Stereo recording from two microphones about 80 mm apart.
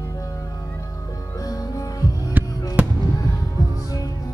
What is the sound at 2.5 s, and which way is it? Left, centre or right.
Fireworks, left.